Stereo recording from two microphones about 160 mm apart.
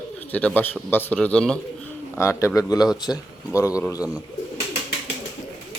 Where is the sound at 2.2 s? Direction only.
15° left (ahead or behind).